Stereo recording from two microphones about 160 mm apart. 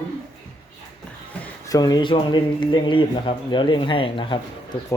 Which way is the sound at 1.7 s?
25° left (ahead or behind).